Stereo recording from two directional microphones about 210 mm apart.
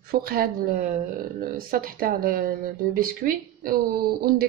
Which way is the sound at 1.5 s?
45° right (ahead or behind).